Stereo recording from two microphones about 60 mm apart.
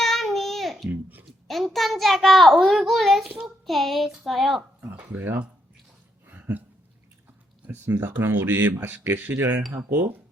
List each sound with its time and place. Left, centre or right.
0.0 s babbling: centre
1.5 s child singing: centre
3.4 s a child's voice: centre
4.8 s a sound: right
7.7 s speech: right